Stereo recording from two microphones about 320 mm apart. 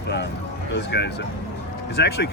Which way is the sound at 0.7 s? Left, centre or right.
Left.